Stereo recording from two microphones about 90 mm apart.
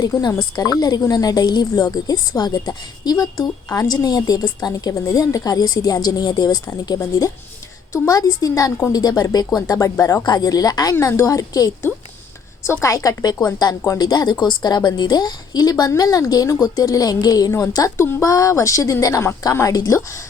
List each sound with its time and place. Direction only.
0.0 s speech: 45° left (ahead or behind)
7.9 s a woman's voice: 40° left (ahead or behind)
12.8 s a woman's voice: 40° left (ahead or behind)
17.5 s a woman's voice: 35° left (ahead or behind)